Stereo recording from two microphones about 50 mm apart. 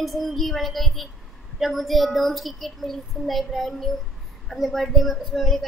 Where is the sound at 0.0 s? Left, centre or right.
Centre.